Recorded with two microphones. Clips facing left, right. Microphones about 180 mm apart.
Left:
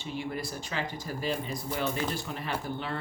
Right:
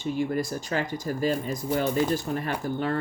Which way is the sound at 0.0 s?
45° right (ahead or behind).